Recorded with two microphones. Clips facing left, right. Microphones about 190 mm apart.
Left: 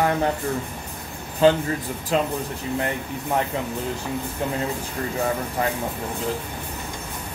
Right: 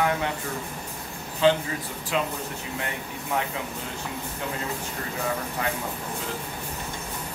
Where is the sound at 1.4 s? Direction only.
45° left (ahead or behind).